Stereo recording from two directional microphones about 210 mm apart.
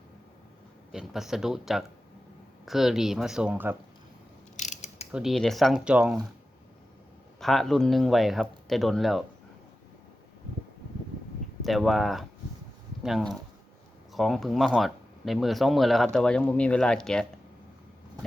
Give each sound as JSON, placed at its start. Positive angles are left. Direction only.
{"t": 0.9, "sound": "speech", "side_deg": 0}
{"t": 4.5, "sound": "pulleys", "side_deg": 35}
{"t": 5.1, "sound": "speech", "side_deg": 0}
{"t": 7.3, "sound": "speech", "side_deg": 0}
{"t": 11.6, "sound": "speech", "side_deg": 0}